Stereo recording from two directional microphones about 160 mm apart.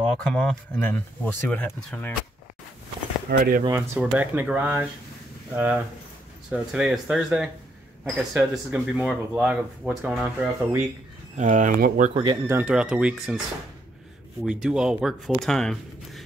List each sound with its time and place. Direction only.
0.2 s speech: 5° left (ahead or behind)
3.3 s speech: 65° right (ahead or behind)
3.7 s speech: 15° right (ahead or behind)
11.3 s speech: 50° right (ahead or behind)
12.1 s speech: 30° right (ahead or behind)
12.4 s speech: 10° right (ahead or behind)
14.4 s speech: 5° right (ahead or behind)